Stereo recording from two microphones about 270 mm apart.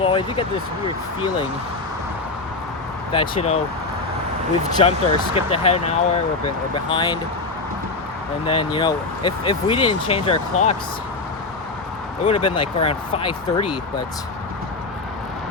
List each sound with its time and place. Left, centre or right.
0.0 s speech: centre
3.1 s speech: left
4.8 s speech: left
6.9 s speech: centre
8.4 s speech: centre
12.2 s speech: left